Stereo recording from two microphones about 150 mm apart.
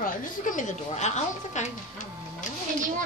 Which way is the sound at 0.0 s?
60° left (ahead or behind).